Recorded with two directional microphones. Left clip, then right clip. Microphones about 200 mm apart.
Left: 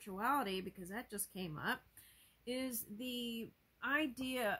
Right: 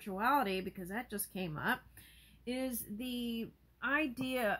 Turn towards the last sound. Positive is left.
turn(degrees=15)  # may be behind; listen again after turning